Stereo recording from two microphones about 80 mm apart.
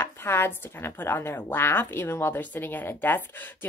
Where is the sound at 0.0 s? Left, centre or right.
Left.